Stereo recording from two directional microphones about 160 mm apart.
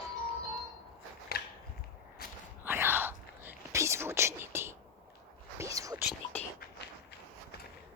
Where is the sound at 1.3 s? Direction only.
80° left.